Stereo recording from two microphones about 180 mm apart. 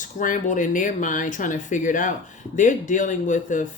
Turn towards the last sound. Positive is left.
turn(degrees=45)  # may be behind; listen again after turning